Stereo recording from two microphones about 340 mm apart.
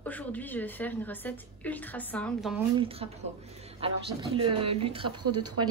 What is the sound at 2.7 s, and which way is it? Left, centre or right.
Speech, centre.